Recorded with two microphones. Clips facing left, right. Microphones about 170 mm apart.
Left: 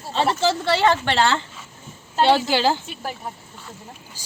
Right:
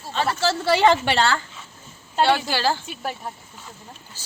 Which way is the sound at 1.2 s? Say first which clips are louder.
Left 2 dB; 20° left (ahead or behind).